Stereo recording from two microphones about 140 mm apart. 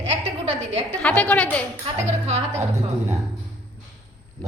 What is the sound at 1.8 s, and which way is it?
Speech, 50° right (ahead or behind).